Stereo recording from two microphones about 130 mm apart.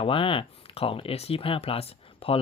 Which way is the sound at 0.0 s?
45° left (ahead or behind).